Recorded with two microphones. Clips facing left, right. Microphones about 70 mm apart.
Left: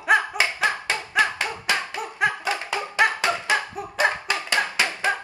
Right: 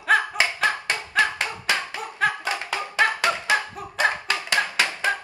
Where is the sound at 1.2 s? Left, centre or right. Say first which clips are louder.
Even; left.